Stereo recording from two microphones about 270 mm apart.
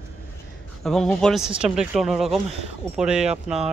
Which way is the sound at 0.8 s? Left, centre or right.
Centre.